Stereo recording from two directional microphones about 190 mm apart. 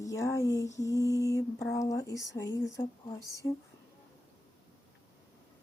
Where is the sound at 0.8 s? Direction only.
15° left (ahead or behind).